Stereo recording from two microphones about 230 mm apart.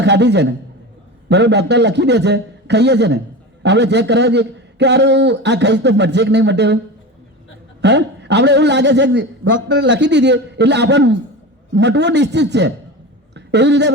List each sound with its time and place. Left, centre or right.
0.0 s a man's voice: right
7.8 s a man's voice: right